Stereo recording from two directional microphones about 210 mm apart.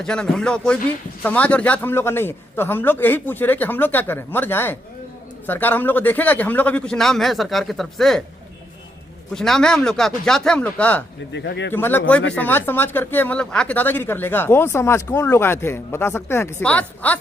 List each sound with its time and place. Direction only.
0.0 s speech: 5° left (ahead or behind)
9.3 s speech: centre (ahead or behind)
11.3 s speech: 55° left (ahead or behind)
11.7 s speech: 10° left (ahead or behind)